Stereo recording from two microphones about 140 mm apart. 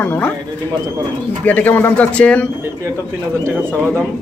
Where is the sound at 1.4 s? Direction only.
10° left (ahead or behind).